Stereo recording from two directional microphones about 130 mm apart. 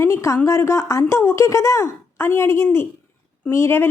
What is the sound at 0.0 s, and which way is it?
Speech, 20° left (ahead or behind).